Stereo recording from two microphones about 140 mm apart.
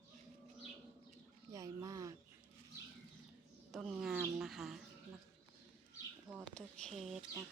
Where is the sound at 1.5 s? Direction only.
25° right (ahead or behind).